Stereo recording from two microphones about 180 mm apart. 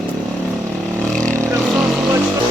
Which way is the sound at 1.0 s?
5° left (ahead or behind).